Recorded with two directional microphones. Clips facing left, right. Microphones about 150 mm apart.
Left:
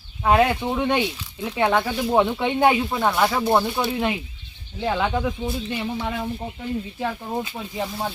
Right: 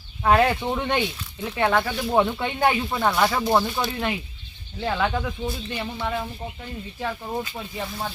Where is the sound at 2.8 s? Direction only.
5° left (ahead or behind).